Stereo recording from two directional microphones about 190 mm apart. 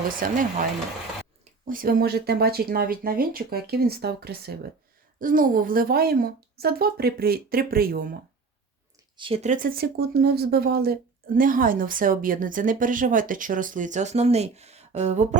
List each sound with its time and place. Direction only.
0.2 s speech: 45° right (ahead or behind)
9.1 s speech: 30° right (ahead or behind)